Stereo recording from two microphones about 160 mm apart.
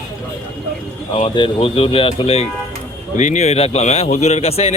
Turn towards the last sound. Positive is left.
turn(degrees=40)  # may be behind; listen again after turning